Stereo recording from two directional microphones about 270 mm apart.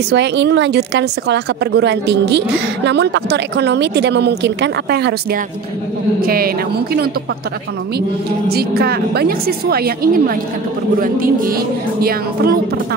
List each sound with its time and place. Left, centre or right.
0.1 s speech: right
8.5 s speech: right